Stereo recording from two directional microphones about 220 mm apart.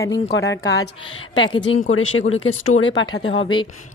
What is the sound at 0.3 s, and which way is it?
Speech, 55° left (ahead or behind).